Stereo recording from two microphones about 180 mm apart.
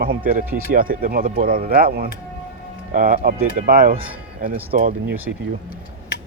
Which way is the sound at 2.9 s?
45° right (ahead or behind).